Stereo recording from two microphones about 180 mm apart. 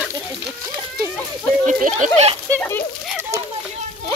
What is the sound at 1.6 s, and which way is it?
Speech, 45° right (ahead or behind).